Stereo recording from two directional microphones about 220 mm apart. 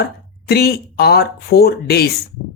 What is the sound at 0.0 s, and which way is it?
Speech, 45° left (ahead or behind).